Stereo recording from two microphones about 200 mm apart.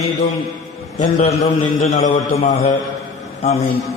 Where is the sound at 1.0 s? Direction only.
35° left (ahead or behind).